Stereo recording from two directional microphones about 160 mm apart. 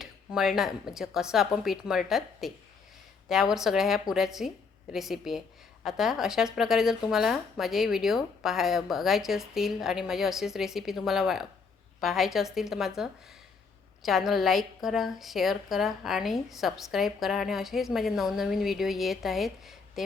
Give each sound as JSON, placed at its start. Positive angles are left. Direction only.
{"t": 0.0, "sound": "a woman's voice", "side_deg": -5}